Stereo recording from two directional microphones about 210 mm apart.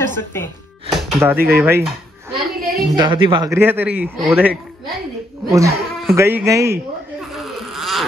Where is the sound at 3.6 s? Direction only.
10° right (ahead or behind).